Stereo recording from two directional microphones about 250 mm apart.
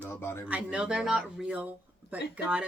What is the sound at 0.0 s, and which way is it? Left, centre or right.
Speech, centre.